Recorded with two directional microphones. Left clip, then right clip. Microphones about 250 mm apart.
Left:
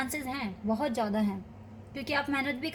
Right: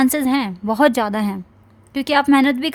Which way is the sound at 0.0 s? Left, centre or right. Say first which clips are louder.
Right 16 dB; right.